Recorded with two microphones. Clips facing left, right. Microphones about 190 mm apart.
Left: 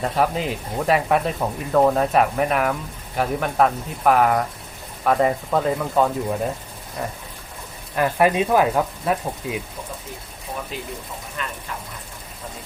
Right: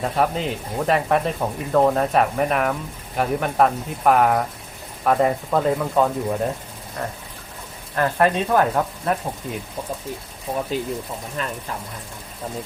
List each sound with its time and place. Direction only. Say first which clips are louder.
0.0 s speech: even; centre (ahead or behind)
7.9 s speech: left 1 dB; 10° left (ahead or behind)
11.4 s speech: right 3 dB; 35° right (ahead or behind)